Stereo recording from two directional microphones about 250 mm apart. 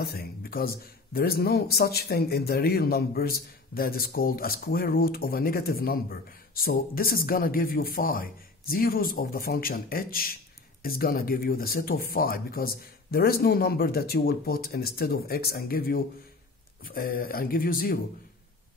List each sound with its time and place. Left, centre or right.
0.0 s speech: left